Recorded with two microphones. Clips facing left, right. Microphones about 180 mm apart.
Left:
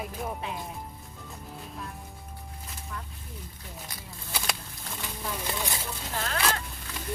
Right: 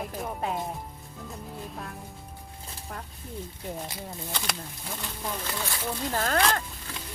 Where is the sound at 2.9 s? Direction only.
55° right (ahead or behind).